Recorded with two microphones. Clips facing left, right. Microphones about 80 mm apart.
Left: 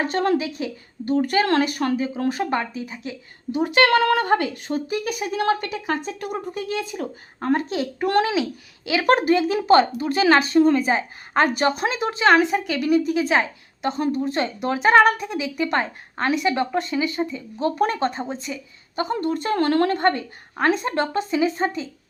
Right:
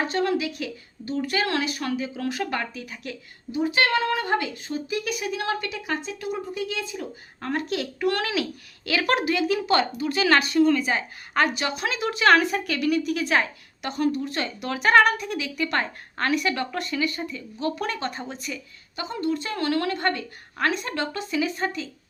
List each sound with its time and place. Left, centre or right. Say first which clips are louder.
0.1 s a woman's voice: left 3 dB; left
1.0 s a woman's voice: left 6 dB; left
3.5 s a woman's voice: left 5 dB; left
7.3 s a woman's voice: left 5 dB; left
8.2 s speech: left 5 dB; left
9.0 s a woman's voice: left 6 dB; left
12.8 s a woman's voice: left 4 dB; left
13.3 s a woman's voice: left 3 dB; centre
13.9 s speech: even; left
18.9 s a woman's voice: left 4 dB; left